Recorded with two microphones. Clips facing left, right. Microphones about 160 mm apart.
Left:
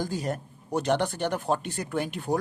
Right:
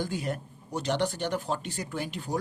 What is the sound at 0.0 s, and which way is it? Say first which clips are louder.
Speech: left 2 dB; 40° left (ahead or behind).